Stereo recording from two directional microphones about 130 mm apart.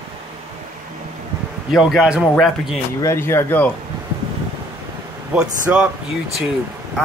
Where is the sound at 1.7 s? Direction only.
Centre (ahead or behind).